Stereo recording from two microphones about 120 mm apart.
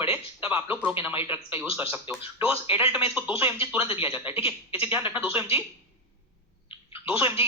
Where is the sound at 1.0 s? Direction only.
20° right (ahead or behind).